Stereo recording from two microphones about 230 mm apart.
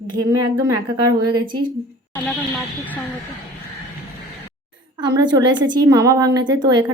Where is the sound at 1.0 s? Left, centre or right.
Right.